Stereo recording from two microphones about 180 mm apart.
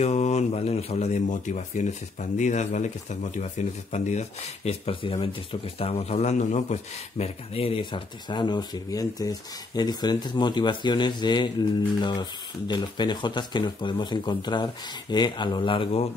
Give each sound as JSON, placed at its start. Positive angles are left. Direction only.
{"t": 0.0, "sound": "speech", "side_deg": 35}